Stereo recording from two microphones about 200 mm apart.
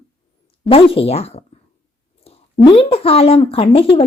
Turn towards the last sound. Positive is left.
turn(degrees=30)  # may be behind; listen again after turning